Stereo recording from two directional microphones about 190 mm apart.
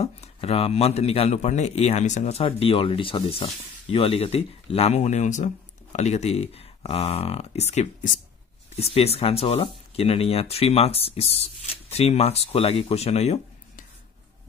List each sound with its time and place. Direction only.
0.0 s speech: 30° left (ahead or behind)